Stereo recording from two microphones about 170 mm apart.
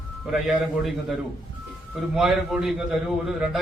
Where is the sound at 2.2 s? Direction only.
Centre (ahead or behind).